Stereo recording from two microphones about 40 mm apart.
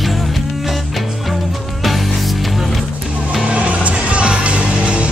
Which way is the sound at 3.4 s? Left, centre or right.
Right.